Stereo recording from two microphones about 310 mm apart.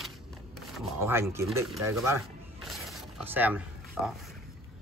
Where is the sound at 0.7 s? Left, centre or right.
Centre.